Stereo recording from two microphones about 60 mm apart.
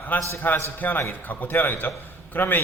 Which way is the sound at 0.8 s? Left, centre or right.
Left.